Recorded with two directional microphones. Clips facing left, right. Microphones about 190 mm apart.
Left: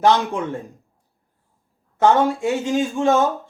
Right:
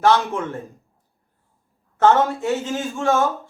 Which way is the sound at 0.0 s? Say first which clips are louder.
Left 1 dB; 15° left (ahead or behind).